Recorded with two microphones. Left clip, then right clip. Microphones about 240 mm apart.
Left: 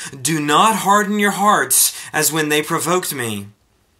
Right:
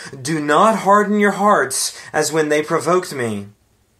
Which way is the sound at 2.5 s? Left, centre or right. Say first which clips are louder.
Right 1 dB; left.